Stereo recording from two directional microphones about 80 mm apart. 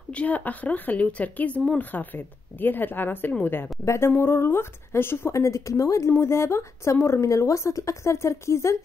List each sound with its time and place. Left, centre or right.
0.1 s a woman's voice: centre; by 8.7 s left